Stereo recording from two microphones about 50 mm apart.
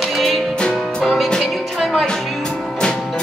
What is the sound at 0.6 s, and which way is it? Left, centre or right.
Music, centre.